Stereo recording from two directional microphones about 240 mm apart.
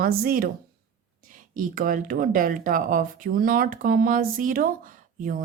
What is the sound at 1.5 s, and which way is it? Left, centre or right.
Speech, right.